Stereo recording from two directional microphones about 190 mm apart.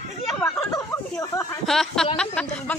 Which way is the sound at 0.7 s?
15° left (ahead or behind).